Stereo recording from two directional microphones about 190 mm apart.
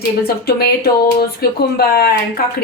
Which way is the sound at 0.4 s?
55° left (ahead or behind).